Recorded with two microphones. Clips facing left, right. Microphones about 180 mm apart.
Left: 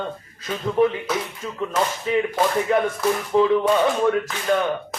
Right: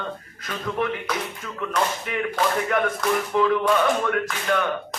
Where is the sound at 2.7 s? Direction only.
30° left (ahead or behind).